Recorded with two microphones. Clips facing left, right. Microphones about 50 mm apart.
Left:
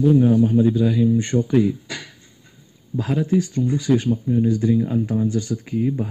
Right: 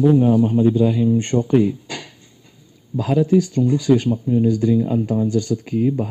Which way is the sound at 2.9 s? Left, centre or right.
Centre.